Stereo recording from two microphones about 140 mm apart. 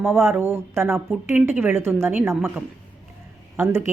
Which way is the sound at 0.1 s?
20° right (ahead or behind).